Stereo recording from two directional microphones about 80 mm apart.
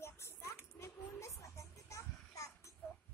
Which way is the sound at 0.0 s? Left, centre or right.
Left.